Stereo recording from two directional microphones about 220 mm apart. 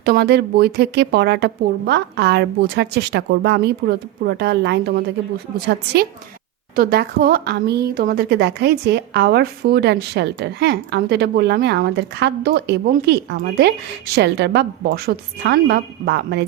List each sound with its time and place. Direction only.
0.0 s a woman's voice: 45° right (ahead or behind)
6.7 s a woman's voice: 45° right (ahead or behind)